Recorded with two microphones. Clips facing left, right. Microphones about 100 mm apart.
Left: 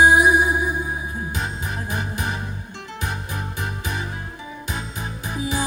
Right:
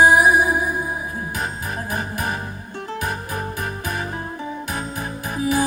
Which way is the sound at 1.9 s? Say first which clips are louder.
Right 2 dB; 40° right (ahead or behind).